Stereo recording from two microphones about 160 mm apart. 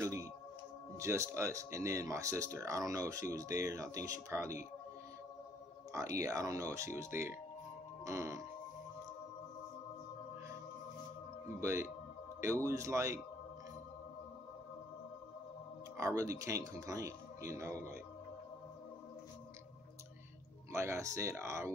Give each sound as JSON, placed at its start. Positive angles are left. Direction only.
{"t": 0.0, "sound": "music", "side_deg": -20}
{"t": 0.9, "sound": "speech", "side_deg": -20}
{"t": 5.9, "sound": "speech", "side_deg": -20}
{"t": 8.0, "sound": "music", "side_deg": -20}
{"t": 11.6, "sound": "speech", "side_deg": -15}
{"t": 16.0, "sound": "speech", "side_deg": -20}
{"t": 20.7, "sound": "speech", "side_deg": -15}